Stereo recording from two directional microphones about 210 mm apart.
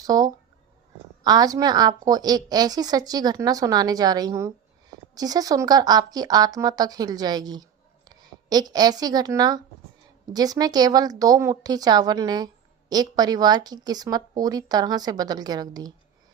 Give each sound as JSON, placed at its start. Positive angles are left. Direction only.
{"t": 0.0, "sound": "a woman's voice", "side_deg": -15}